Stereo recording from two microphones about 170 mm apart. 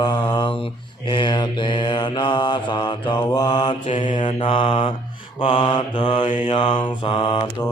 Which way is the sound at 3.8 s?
35° left (ahead or behind).